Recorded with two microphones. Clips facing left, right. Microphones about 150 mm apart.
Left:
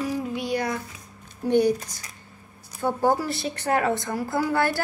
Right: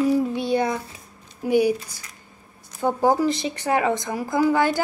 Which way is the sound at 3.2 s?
15° right (ahead or behind).